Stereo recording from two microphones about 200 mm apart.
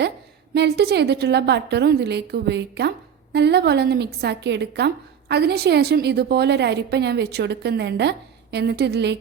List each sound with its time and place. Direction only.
0.5 s a woman's voice: 55° right (ahead or behind)